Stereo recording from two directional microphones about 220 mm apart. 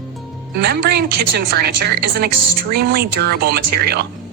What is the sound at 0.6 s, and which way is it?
A woman's voice, 50° right (ahead or behind).